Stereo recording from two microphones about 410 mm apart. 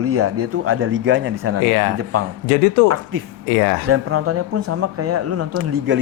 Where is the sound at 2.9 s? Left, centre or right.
Right.